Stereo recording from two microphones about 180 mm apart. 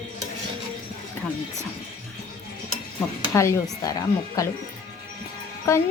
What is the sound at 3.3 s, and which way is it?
A woman's voice, 15° left (ahead or behind).